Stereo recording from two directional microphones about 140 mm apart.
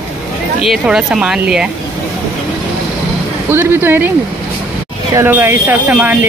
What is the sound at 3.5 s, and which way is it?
Speech, 15° right (ahead or behind).